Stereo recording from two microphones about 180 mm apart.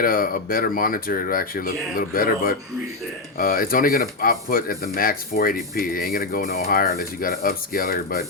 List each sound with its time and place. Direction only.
0.0 s speech: 55° left (ahead or behind)